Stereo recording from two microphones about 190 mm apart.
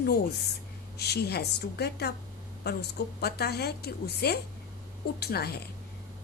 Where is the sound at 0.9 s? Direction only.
60° left (ahead or behind).